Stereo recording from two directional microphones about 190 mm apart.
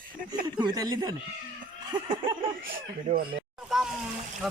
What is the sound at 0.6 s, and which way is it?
Speech, 20° right (ahead or behind).